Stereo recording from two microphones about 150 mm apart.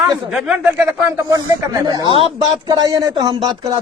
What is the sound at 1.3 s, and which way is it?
Speech, 25° right (ahead or behind).